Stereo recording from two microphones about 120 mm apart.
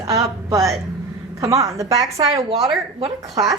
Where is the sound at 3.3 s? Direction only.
30° right (ahead or behind).